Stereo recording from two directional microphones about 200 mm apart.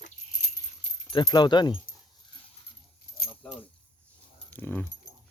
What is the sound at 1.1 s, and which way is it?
Speech, 20° left (ahead or behind).